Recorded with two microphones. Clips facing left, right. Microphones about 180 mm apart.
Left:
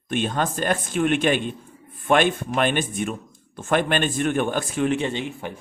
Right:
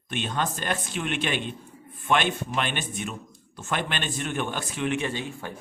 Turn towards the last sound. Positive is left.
turn(degrees=20)  # may be behind; listen again after turning